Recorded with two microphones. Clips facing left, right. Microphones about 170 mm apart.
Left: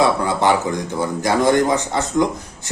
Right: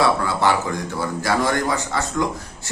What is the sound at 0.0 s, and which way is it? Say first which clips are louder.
A man's voice: left 2 dB; 20° left (ahead or behind).